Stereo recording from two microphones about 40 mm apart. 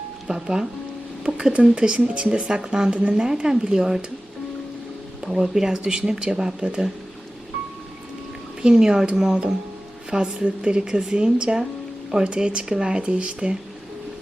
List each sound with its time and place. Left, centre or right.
0.4 s speech: centre
5.2 s speech: centre
8.6 s speech: centre